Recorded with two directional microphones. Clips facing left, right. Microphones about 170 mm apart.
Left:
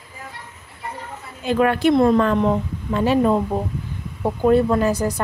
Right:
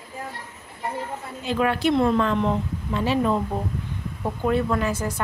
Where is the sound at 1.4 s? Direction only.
55° left (ahead or behind).